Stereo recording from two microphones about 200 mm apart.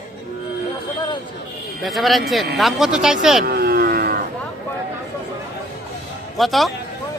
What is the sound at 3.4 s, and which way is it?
Vehicle, 50° right (ahead or behind).